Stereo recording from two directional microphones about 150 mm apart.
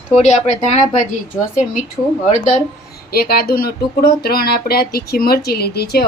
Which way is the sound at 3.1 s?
90° left.